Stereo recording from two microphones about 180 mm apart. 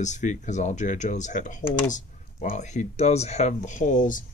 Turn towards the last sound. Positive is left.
turn(degrees=45)  # may be behind; listen again after turning